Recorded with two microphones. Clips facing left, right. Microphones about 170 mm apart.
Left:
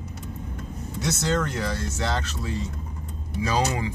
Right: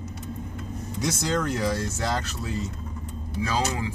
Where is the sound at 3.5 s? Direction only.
15° left (ahead or behind).